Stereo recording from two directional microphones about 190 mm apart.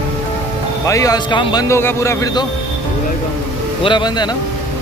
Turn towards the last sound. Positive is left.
turn(degrees=20)  # may be behind; listen again after turning